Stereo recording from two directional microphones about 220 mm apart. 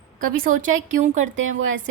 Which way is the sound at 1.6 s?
60° right (ahead or behind).